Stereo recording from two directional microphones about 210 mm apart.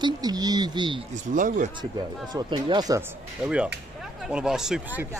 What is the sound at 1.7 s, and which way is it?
Speech, 20° right (ahead or behind).